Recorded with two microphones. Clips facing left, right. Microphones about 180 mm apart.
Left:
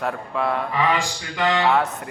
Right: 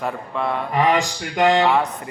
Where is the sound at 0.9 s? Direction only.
45° right (ahead or behind).